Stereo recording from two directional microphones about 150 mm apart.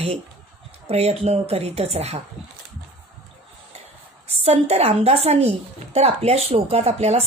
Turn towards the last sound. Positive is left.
turn(degrees=-45)  # may be behind; listen again after turning